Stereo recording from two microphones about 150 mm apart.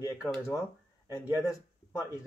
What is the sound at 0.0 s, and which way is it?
Speech, 20° left (ahead or behind).